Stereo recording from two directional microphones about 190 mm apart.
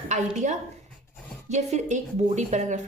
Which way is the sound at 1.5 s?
40° right (ahead or behind).